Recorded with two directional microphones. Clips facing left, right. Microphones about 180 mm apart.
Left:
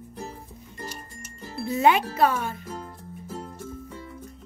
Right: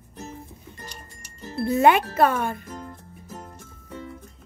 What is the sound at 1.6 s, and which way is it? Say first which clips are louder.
Speech: right 3 dB; 55° right (ahead or behind).